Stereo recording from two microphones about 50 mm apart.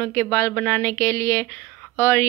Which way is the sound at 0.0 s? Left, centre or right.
Left.